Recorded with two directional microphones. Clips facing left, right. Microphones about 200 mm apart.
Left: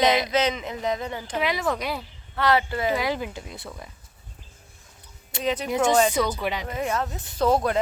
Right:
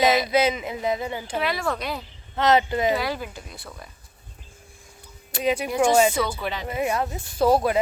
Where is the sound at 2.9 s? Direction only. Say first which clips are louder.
Left 1 dB; 20° left (ahead or behind).